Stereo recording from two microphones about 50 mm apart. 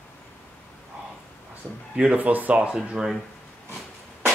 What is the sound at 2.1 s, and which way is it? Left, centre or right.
Speech, right.